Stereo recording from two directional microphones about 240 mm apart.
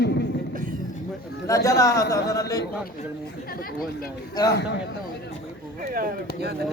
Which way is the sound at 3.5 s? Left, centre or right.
Left.